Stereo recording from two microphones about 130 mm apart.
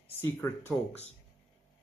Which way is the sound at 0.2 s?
15° left (ahead or behind).